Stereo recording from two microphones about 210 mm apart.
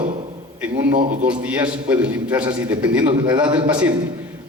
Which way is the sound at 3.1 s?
20° right (ahead or behind).